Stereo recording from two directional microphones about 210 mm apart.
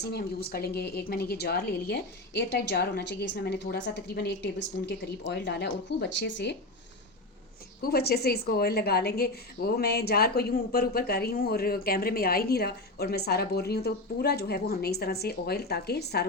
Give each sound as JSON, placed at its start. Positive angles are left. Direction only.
{"t": 0.1, "sound": "a woman's voice", "side_deg": 50}
{"t": 7.8, "sound": "a woman's voice", "side_deg": 45}